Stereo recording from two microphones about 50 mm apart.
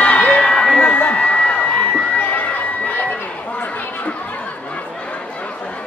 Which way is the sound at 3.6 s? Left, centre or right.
Left.